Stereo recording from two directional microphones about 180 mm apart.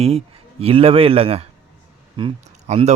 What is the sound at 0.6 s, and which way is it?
Speech, 30° right (ahead or behind).